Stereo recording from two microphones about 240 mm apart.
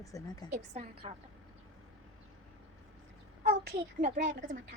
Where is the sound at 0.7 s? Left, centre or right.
Right.